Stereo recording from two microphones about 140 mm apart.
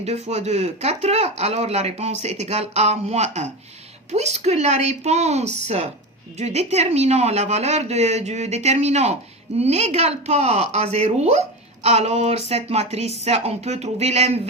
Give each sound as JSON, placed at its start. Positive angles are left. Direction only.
{"t": 0.0, "sound": "speech", "side_deg": -50}